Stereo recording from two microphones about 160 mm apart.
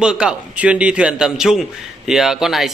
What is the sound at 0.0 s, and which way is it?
Speech, 5° right (ahead or behind).